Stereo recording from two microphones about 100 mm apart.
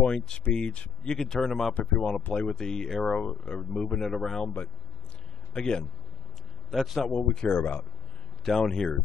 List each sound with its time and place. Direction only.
0.0 s speech: 10° left (ahead or behind)
5.5 s speech: 10° left (ahead or behind)
7.1 s speech: 10° left (ahead or behind)
8.5 s speech: 5° left (ahead or behind)